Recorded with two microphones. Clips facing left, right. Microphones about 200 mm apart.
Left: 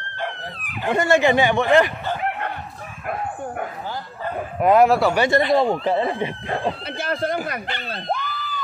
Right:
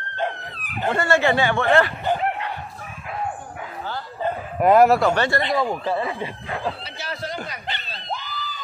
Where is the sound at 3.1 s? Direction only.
55° left (ahead or behind).